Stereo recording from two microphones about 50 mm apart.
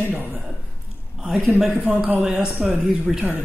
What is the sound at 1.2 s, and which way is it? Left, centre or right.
A man's voice, centre.